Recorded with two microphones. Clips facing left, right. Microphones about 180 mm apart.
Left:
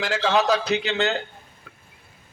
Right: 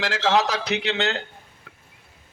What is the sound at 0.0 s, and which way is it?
A man's voice, 80° right.